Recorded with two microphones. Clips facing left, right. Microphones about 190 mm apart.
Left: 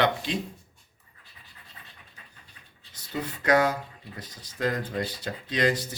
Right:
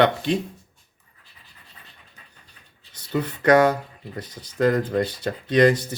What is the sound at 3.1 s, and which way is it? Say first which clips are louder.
Speech: right 6 dB; 65° right (ahead or behind).